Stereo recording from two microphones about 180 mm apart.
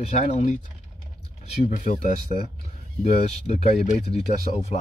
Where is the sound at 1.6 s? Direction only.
45° left (ahead or behind).